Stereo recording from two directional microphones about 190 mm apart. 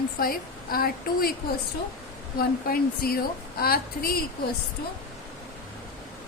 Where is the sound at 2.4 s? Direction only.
50° left (ahead or behind).